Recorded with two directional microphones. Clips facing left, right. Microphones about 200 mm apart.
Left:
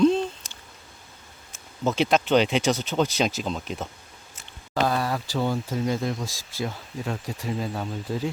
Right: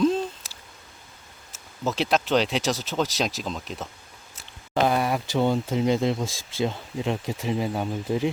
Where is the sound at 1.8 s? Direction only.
Centre (ahead or behind).